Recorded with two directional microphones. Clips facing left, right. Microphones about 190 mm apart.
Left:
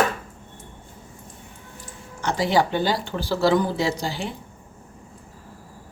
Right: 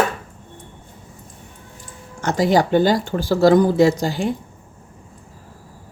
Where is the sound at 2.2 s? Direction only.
45° right (ahead or behind).